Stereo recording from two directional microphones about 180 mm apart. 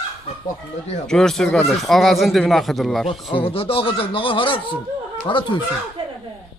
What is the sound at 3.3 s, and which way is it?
Speech, 30° left (ahead or behind).